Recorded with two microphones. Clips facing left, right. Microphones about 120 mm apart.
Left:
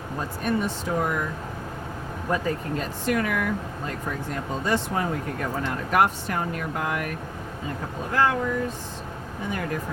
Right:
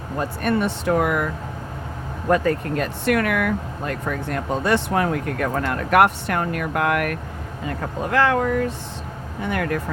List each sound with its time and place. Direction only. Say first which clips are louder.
0.2 s speech: right 5 dB; 70° right (ahead or behind)
2.3 s speech: right 7 dB; 70° right (ahead or behind)